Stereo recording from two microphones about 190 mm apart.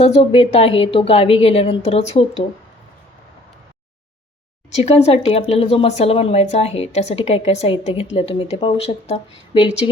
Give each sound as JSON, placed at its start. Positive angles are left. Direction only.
{"t": 0.0, "sound": "speech", "side_deg": 30}
{"t": 4.7, "sound": "speech", "side_deg": 35}